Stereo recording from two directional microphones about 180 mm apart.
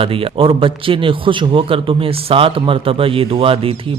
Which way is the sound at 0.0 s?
30° right (ahead or behind).